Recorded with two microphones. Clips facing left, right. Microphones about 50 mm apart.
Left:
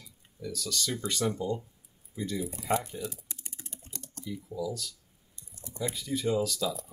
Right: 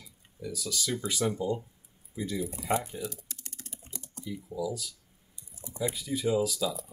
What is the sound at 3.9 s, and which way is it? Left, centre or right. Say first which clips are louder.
Speech: even; centre.